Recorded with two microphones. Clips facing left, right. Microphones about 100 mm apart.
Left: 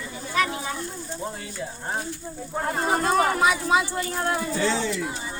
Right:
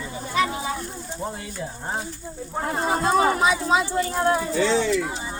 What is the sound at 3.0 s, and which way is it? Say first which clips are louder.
Speech: right 2 dB; 25° right (ahead or behind).